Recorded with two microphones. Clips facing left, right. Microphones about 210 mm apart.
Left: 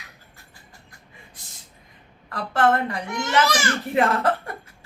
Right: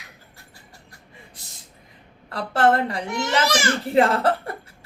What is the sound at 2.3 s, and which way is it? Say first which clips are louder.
A child's voice: right 1 dB; 30° right (ahead or behind).